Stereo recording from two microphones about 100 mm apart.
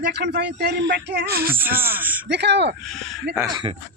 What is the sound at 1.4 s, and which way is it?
Speech, 20° right (ahead or behind).